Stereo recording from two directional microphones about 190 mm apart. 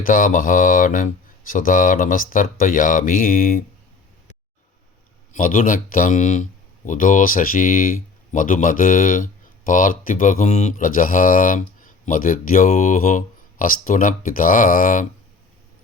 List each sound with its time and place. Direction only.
0.0 s speech: 45° left (ahead or behind)
5.3 s speech: 45° left (ahead or behind)